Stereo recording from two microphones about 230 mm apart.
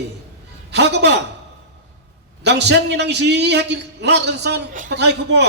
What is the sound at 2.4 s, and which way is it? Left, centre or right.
A man's voice, right.